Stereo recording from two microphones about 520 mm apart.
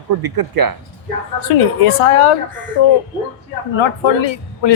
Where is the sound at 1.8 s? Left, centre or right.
Left.